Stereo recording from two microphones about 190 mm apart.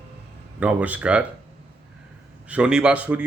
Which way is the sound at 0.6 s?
5° right (ahead or behind).